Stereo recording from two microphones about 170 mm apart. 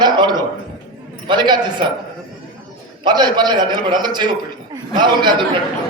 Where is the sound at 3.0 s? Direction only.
25° right (ahead or behind).